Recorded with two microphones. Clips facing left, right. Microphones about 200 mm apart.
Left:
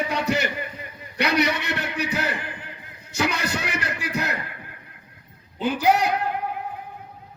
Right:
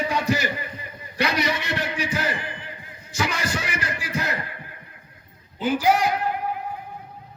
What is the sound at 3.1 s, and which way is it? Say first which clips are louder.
Music: left 1 dB; 60° left (ahead or behind).